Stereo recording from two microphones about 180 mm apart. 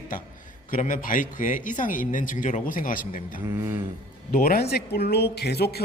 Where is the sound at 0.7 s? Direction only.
45° left (ahead or behind).